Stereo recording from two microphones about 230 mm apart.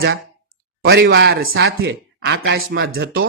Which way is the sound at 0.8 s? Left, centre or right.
Right.